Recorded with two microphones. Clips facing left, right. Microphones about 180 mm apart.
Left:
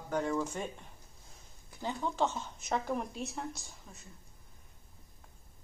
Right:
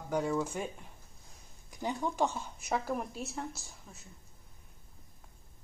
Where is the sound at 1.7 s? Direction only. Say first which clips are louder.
Right 2 dB; 15° right (ahead or behind).